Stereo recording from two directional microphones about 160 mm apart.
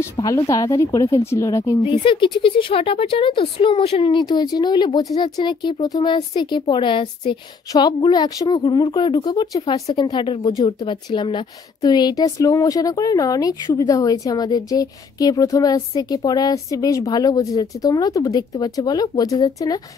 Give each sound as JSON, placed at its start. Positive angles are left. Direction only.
{"t": 0.0, "sound": "speech", "side_deg": 20}
{"t": 1.8, "sound": "speech", "side_deg": 30}